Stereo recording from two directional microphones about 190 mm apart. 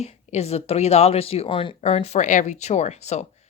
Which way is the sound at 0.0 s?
35° left (ahead or behind).